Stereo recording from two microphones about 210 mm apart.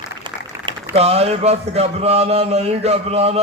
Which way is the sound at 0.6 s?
30° right (ahead or behind).